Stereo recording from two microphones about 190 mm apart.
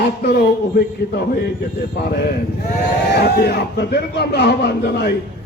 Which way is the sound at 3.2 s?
55° left (ahead or behind).